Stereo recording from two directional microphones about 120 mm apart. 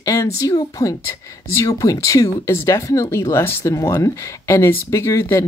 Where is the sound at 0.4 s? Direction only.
30° left (ahead or behind).